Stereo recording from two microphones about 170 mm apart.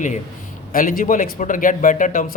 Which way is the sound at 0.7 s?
55° left (ahead or behind).